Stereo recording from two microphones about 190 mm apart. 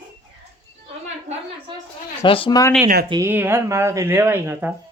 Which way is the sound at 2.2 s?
25° left (ahead or behind).